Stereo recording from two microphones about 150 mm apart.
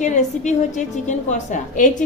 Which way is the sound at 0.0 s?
55° left (ahead or behind).